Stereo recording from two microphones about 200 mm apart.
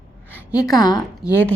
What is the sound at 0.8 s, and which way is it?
Speech, 20° left (ahead or behind).